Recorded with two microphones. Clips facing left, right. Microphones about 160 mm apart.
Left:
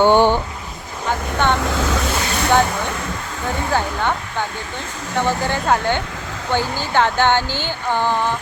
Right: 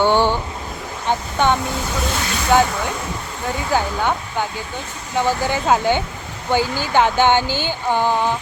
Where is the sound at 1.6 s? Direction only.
90° left.